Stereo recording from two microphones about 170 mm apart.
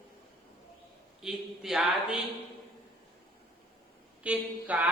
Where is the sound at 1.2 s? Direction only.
Centre (ahead or behind).